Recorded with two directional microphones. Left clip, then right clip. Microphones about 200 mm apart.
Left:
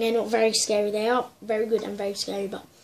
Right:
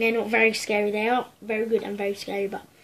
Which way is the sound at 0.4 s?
5° right (ahead or behind).